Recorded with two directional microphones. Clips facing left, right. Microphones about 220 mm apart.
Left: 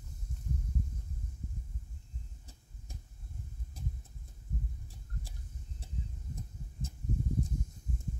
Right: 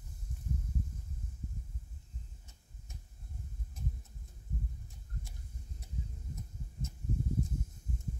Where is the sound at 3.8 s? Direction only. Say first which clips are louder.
Right 1 dB; 35° left (ahead or behind).